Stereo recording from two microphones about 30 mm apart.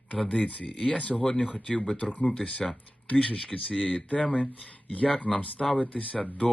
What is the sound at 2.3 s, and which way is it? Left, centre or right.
Speech, left.